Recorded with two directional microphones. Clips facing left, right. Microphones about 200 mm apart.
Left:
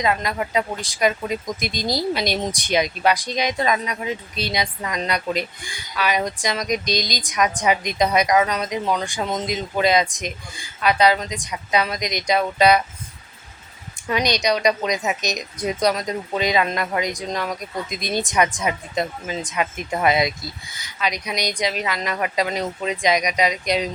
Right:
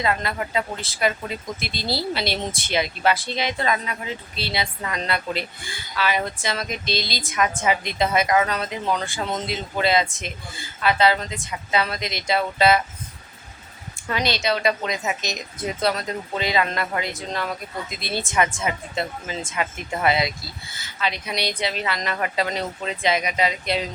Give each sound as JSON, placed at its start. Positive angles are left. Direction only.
{"t": 0.0, "sound": "speech", "side_deg": 15}
{"t": 13.9, "sound": "speech", "side_deg": 15}